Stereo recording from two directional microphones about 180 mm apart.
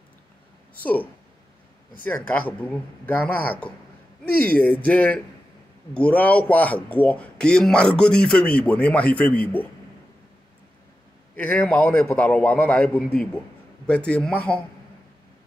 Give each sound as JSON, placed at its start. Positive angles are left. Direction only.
{"t": 2.0, "sound": "speech", "side_deg": 10}
{"t": 11.3, "sound": "speech", "side_deg": 10}